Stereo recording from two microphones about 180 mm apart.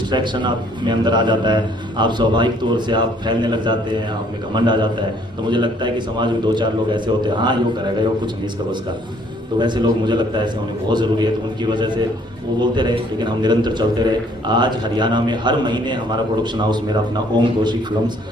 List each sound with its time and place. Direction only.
0.1 s a man's voice: 25° right (ahead or behind)
9.6 s a man's voice: 25° right (ahead or behind)